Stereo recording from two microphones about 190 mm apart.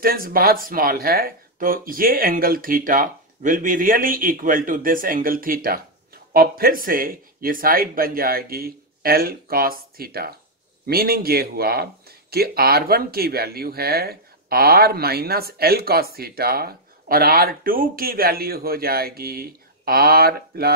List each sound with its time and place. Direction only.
0.0 s speech: 50° right (ahead or behind)